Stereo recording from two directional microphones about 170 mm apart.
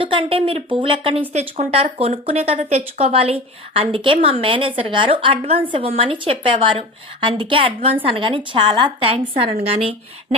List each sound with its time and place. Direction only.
0.0 s speech: 30° right (ahead or behind)